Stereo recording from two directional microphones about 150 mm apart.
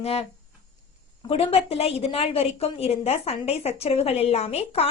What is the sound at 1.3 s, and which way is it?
Speech, 40° left (ahead or behind).